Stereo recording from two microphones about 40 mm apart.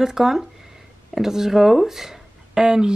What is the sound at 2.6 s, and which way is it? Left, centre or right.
Speech, right.